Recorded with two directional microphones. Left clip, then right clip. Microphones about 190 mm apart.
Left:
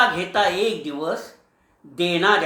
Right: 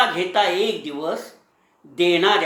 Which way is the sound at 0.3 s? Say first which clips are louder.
Right 1 dB; 10° left (ahead or behind).